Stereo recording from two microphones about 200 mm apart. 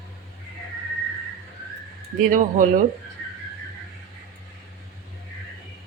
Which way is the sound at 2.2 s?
45° right (ahead or behind).